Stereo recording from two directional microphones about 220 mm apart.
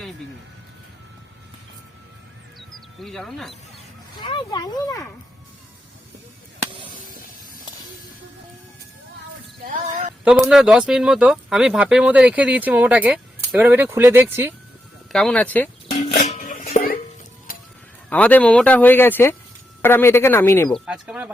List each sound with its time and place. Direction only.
2.6 s bird: centre (ahead or behind)
4.2 s speech: 20° left (ahead or behind)
9.6 s a sound: 35° right (ahead or behind)
10.2 s speech: 5° right (ahead or behind)
15.1 s speech: 5° left (ahead or behind)
15.9 s music: 30° left (ahead or behind)
18.1 s speech: 5° left (ahead or behind)
20.7 s speech: 5° right (ahead or behind)